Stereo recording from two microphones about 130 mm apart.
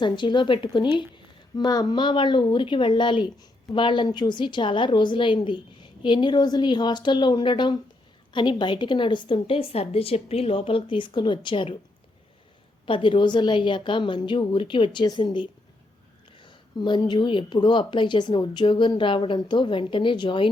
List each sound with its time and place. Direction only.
0.0 s a woman's voice: 35° left (ahead or behind)
12.8 s a woman's voice: 40° left (ahead or behind)